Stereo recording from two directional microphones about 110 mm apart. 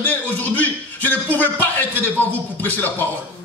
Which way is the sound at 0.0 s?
15° left (ahead or behind).